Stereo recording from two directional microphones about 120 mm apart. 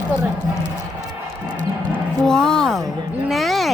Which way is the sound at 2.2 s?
5° left (ahead or behind).